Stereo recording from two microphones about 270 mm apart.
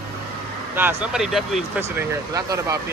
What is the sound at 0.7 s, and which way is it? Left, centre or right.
Speech, centre.